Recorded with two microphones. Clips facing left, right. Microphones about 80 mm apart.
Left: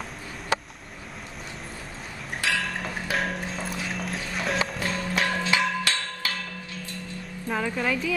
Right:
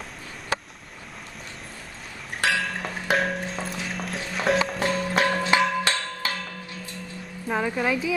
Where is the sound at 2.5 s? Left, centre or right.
Centre.